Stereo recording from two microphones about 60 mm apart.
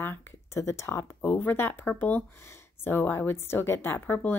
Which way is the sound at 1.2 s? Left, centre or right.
Left.